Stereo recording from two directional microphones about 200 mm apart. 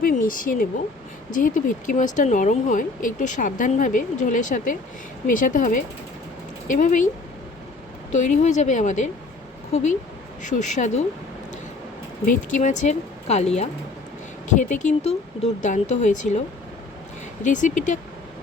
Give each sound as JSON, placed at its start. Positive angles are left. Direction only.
{"t": 0.0, "sound": "speech", "side_deg": 45}
{"t": 8.1, "sound": "speech", "side_deg": 35}
{"t": 12.2, "sound": "speech", "side_deg": 40}
{"t": 14.5, "sound": "speech", "side_deg": 40}
{"t": 17.4, "sound": "speech", "side_deg": 40}